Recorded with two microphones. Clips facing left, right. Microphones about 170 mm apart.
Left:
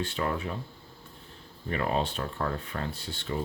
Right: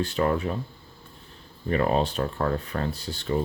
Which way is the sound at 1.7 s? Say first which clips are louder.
Right 6 dB; 40° right (ahead or behind).